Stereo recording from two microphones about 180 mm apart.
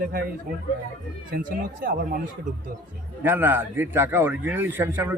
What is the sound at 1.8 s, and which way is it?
Speech, 55° right (ahead or behind).